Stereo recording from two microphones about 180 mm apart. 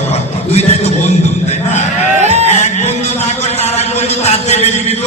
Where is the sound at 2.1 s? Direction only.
40° right (ahead or behind).